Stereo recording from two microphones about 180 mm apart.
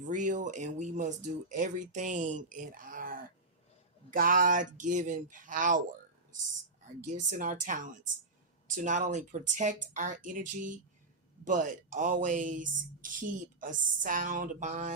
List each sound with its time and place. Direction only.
0.1 s speech: 45° right (ahead or behind)
6.8 s speech: 45° right (ahead or behind)